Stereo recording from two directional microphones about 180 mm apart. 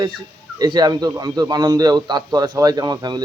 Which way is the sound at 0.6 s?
25° right (ahead or behind).